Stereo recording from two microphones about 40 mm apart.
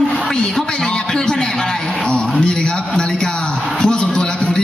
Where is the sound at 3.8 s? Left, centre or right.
Left.